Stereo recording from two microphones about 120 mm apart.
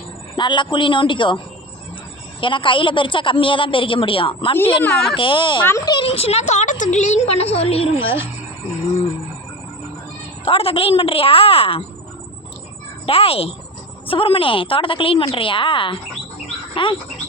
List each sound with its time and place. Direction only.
0.3 s a woman's voice: 40° left (ahead or behind)
2.4 s a woman's voice: 45° left (ahead or behind)
4.8 s speech: 10° left (ahead or behind)
5.1 s a woman's voice: 45° left (ahead or behind)
6.1 s a woman's voice: 55° left (ahead or behind)
10.4 s a woman's voice: 50° left (ahead or behind)
13.1 s a woman's voice: 55° left (ahead or behind)